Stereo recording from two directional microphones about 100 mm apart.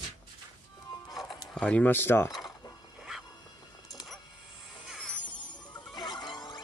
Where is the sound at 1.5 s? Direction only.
10° left (ahead or behind).